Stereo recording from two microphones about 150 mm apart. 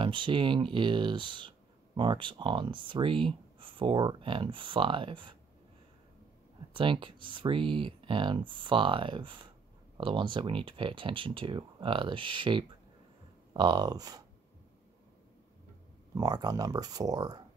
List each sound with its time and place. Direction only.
0.0 s speech: 35° right (ahead or behind)
6.7 s speech: 35° right (ahead or behind)
16.2 s speech: 25° right (ahead or behind)